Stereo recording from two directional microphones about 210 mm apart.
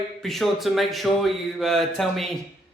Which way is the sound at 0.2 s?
Centre (ahead or behind).